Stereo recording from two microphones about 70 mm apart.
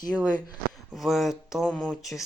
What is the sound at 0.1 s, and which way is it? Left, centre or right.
Speech, centre.